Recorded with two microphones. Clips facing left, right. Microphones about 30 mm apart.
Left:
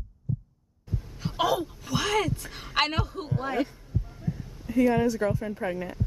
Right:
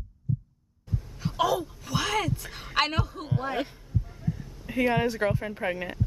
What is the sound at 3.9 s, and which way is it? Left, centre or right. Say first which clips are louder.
Heart sounds: right 1 dB; centre.